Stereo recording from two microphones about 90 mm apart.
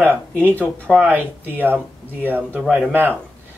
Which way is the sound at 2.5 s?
5° right (ahead or behind).